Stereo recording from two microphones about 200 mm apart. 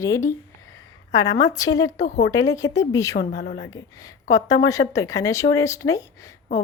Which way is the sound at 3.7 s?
15° left (ahead or behind).